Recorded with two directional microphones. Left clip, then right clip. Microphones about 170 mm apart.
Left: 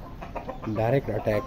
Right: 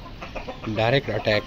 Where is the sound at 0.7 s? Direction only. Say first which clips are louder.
Right 4 dB; 10° left (ahead or behind).